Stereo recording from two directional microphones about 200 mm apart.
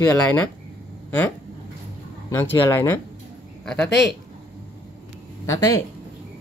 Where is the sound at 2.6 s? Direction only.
10° left (ahead or behind).